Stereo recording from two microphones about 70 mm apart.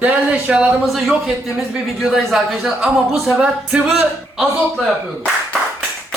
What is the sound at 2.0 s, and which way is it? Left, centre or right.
Speech, centre.